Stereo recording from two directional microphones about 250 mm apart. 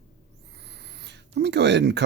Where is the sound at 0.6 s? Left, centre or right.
Right.